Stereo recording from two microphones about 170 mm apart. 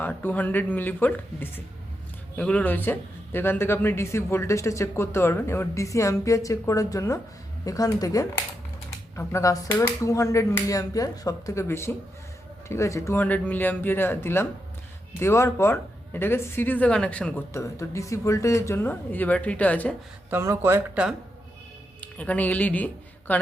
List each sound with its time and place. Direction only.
0.0 s speech: 10° left (ahead or behind)
20.3 s speech: 15° right (ahead or behind)
22.0 s speech: 10° left (ahead or behind)